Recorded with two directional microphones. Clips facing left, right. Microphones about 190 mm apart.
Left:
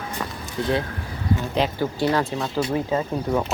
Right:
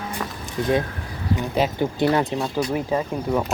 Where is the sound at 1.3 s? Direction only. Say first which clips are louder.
Right 1 dB; 20° right (ahead or behind).